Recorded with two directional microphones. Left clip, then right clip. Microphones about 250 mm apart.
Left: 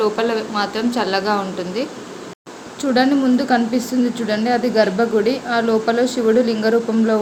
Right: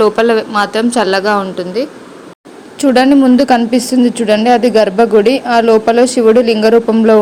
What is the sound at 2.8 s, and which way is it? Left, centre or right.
A woman's voice, right.